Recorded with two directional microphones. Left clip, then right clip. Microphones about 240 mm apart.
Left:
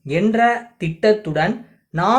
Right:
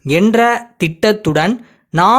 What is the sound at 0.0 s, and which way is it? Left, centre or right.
Speech, right.